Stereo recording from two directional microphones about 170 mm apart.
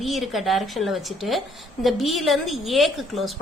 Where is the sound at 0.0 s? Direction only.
Centre (ahead or behind).